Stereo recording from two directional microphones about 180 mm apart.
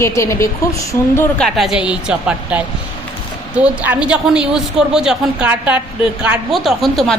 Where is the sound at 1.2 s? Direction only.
5° left (ahead or behind).